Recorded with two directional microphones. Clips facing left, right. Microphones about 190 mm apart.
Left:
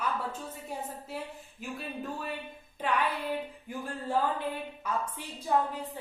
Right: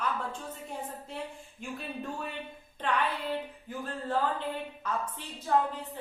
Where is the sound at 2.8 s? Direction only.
10° left (ahead or behind).